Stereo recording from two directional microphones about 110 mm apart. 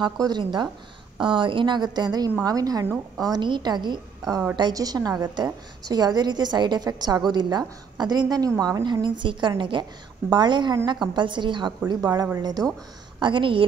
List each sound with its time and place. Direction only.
0.0 s a woman's voice: 45° right (ahead or behind)
13.2 s speech: 50° right (ahead or behind)